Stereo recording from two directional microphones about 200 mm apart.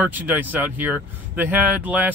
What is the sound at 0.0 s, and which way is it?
Speech, 10° right (ahead or behind).